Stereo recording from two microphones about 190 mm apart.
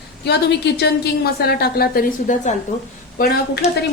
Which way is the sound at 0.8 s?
60° left (ahead or behind).